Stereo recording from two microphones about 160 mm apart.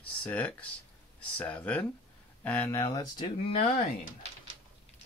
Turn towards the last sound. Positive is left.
turn(degrees=45)  # may be behind; listen again after turning